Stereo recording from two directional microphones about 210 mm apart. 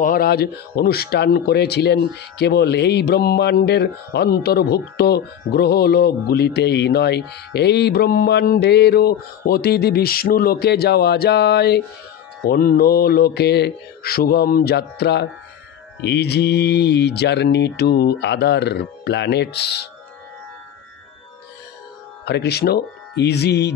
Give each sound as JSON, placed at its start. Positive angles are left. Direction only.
{"t": 0.0, "sound": "speech", "side_deg": 45}
{"t": 22.2, "sound": "speech", "side_deg": 50}